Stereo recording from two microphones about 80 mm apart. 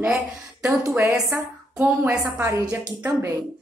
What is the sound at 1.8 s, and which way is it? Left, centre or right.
Speech, right.